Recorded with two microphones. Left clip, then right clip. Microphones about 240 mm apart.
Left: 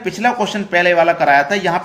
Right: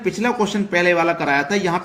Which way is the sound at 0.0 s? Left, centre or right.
Centre.